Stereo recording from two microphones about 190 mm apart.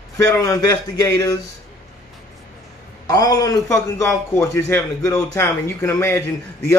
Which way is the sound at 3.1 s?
20° left (ahead or behind).